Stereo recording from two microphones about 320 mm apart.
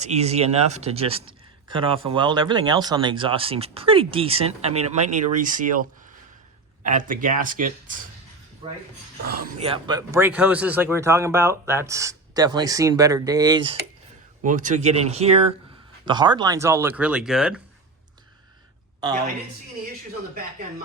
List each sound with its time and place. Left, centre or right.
0.0 s speech: centre
6.8 s speech: right; by 17.6 s centre